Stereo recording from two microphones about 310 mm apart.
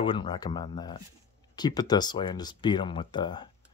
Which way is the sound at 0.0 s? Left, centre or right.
Centre.